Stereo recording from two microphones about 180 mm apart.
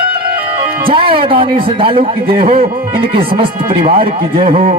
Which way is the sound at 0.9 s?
30° right (ahead or behind).